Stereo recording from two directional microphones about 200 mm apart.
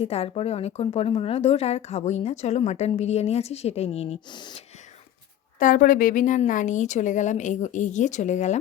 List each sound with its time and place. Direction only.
0.0 s a woman's voice: 30° left (ahead or behind)
5.5 s a woman's voice: 40° left (ahead or behind)